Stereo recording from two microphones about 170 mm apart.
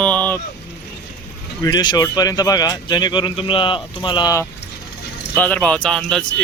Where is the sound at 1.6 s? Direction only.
25° left (ahead or behind).